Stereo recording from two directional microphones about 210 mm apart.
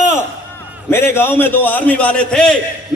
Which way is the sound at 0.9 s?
10° left (ahead or behind).